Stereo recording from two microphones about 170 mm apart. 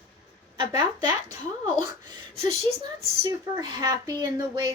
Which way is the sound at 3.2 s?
25° right (ahead or behind).